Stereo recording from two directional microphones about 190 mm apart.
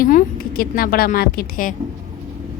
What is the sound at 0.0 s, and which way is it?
A woman's voice, 45° left (ahead or behind).